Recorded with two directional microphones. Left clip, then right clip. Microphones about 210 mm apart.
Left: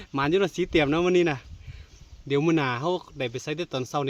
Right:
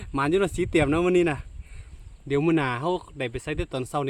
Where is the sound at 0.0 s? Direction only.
5° right (ahead or behind).